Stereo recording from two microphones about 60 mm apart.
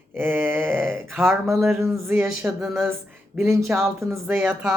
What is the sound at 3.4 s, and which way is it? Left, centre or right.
Speech, right.